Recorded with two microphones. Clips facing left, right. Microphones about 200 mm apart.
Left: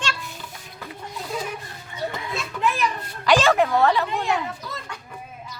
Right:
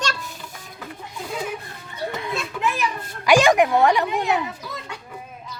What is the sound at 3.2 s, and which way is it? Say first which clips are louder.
A woman's voice: right 2 dB; 15° right (ahead or behind).